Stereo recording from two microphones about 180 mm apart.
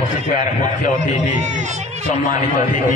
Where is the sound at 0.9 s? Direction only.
40° right (ahead or behind).